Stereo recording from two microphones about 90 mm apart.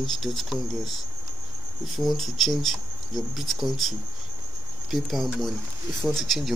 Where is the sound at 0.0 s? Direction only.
Centre (ahead or behind).